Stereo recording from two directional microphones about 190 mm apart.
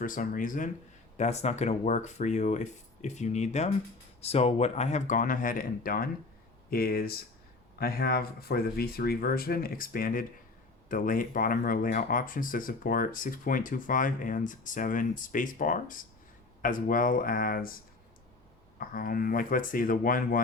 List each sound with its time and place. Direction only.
0.0 s speech: 45° left (ahead or behind)
18.8 s speech: 50° left (ahead or behind)